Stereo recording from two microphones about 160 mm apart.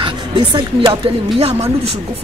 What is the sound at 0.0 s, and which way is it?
A woman's voice, 30° right (ahead or behind).